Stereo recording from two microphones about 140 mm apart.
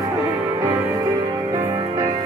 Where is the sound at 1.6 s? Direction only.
25° right (ahead or behind).